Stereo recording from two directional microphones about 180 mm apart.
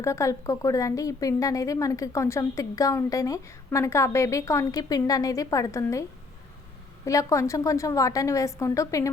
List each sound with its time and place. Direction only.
0.0 s speech: 15° left (ahead or behind)